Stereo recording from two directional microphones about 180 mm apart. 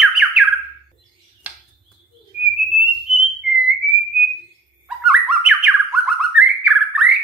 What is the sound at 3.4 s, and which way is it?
Whistle, 75° right (ahead or behind).